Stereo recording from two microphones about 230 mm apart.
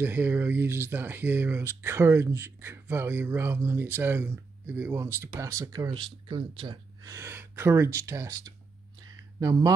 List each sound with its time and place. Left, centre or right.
0.0 s speech: centre